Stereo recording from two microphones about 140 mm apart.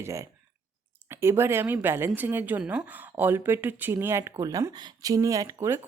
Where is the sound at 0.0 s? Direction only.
20° right (ahead or behind).